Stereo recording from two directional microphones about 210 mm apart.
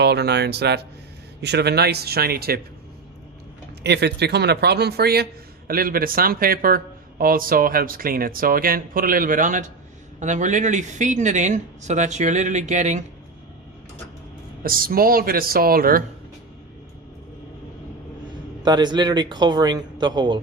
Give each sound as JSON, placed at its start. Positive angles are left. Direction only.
{"t": 0.0, "sound": "a man's voice", "side_deg": -50}
{"t": 3.8, "sound": "a man's voice", "side_deg": -50}
{"t": 14.6, "sound": "a man's voice", "side_deg": -45}
{"t": 18.6, "sound": "a man's voice", "side_deg": -20}